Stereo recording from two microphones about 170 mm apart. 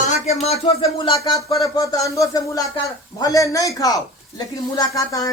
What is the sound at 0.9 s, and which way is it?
Speech, 25° left (ahead or behind).